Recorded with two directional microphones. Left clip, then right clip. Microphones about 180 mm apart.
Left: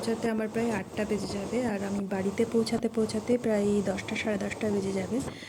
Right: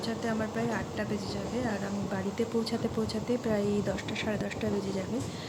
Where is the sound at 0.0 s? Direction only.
10° left (ahead or behind).